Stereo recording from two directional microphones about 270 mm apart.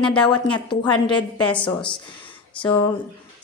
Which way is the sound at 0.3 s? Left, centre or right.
Centre.